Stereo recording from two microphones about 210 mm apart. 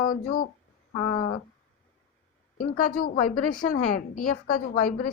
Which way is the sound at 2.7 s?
40° left (ahead or behind).